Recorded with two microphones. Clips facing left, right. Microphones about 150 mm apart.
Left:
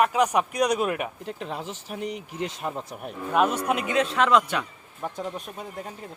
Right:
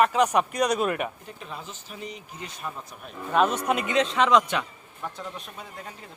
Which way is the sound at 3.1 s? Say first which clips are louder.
Even; 10° left (ahead or behind).